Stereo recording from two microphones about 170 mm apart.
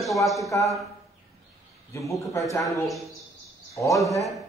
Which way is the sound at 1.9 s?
20° left (ahead or behind).